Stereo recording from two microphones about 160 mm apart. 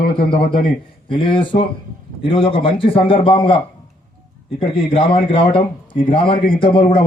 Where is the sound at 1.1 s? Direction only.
30° left (ahead or behind).